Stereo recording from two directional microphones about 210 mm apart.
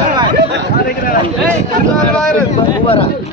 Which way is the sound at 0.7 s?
45° left (ahead or behind).